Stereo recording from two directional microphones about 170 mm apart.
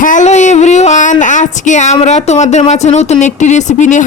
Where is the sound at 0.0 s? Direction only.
45° left (ahead or behind).